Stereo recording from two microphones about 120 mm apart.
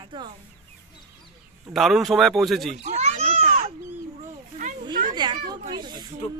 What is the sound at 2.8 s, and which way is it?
Speech, 65° right (ahead or behind).